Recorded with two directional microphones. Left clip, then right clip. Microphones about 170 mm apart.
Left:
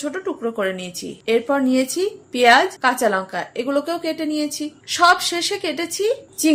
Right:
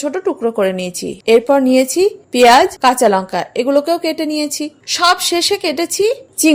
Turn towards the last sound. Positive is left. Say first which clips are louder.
# right 6 dB
turn(degrees=-45)  # may be behind; listen again after turning